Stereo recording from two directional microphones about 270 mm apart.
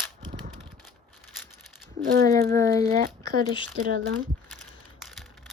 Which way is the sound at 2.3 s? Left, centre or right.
Centre.